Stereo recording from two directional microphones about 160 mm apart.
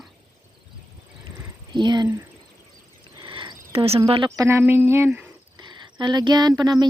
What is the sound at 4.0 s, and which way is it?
Speech, 35° right (ahead or behind).